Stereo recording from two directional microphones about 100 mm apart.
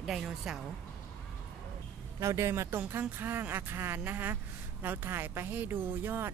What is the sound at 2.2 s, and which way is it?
Speech, 30° right (ahead or behind).